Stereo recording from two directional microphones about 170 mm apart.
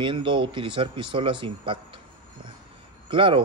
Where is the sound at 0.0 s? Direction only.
30° right (ahead or behind).